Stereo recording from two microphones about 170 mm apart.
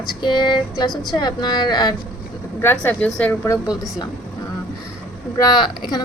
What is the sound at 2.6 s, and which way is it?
Speech, 10° left (ahead or behind).